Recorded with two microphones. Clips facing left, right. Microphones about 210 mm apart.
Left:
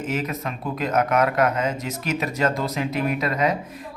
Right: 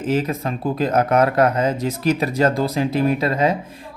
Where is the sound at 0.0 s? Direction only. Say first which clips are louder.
Right 6 dB; 30° right (ahead or behind).